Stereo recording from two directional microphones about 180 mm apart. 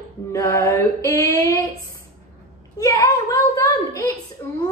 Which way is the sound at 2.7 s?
15° left (ahead or behind).